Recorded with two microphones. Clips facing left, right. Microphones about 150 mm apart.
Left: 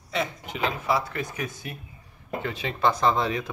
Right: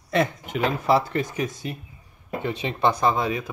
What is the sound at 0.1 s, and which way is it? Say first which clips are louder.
Speech: right 6 dB; 50° right (ahead or behind).